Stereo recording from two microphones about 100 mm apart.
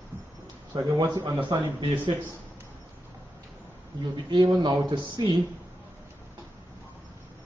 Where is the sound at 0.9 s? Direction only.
45° right (ahead or behind).